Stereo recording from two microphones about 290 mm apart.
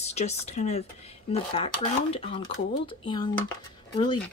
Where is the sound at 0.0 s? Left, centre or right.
Left.